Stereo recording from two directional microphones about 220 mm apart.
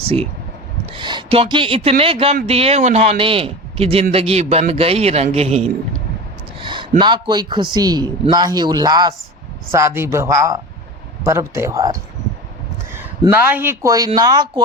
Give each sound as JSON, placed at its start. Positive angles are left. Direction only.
{"t": 0.0, "sound": "speech", "side_deg": -25}
{"t": 6.6, "sound": "a sound", "side_deg": -20}
{"t": 7.0, "sound": "a man's voice", "side_deg": -20}